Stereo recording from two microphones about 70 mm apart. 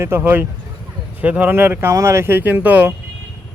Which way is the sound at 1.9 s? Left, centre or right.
Right.